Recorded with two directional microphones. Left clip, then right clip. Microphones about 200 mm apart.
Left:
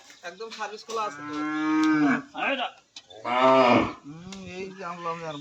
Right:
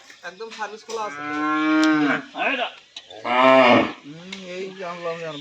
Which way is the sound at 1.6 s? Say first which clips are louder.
Right 3 dB; 60° left (ahead or behind).